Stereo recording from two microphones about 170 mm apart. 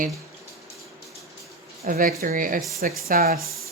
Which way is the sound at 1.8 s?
55° right (ahead or behind).